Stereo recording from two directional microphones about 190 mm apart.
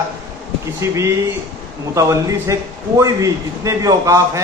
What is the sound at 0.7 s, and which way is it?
A man's voice, 15° right (ahead or behind).